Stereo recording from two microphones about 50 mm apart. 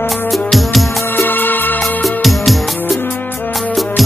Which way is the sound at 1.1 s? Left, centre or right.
Left.